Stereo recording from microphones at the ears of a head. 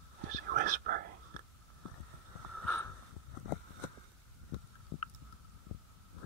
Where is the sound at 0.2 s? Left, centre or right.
Right.